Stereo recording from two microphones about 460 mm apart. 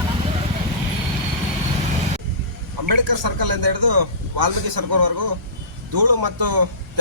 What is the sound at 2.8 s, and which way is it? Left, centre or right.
A man's voice, right.